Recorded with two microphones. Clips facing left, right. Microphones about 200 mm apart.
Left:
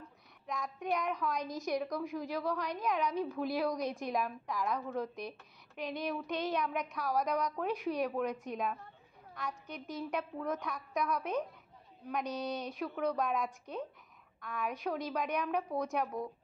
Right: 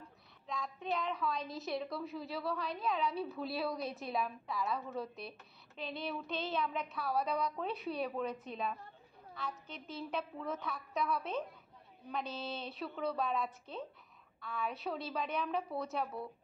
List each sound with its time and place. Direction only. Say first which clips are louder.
0.5 s a woman's voice: left 3 dB; 15° left (ahead or behind)
4.7 s a woman's voice: left 4 dB; 5° right (ahead or behind)
5.8 s speech: left 4 dB; 15° left (ahead or behind)